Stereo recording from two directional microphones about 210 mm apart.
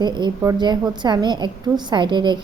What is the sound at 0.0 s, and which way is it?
A woman's voice, 20° right (ahead or behind).